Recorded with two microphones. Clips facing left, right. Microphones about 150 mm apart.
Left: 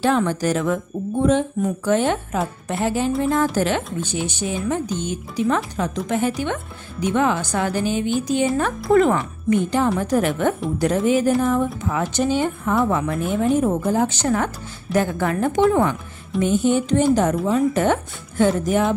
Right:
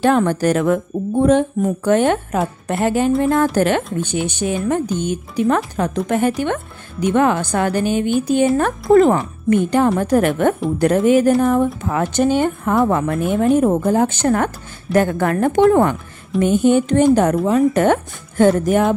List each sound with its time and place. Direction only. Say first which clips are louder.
0.0 s a woman's voice: right 4 dB; 50° right (ahead or behind)
8.9 s speech: right 4 dB; 35° right (ahead or behind)
9.5 s a woman's voice: right 4 dB; 55° right (ahead or behind)